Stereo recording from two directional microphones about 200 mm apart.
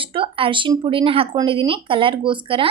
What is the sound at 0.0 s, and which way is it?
A woman's voice, 25° right (ahead or behind).